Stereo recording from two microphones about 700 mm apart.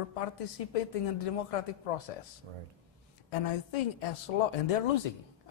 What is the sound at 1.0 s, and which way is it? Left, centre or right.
Speech, left.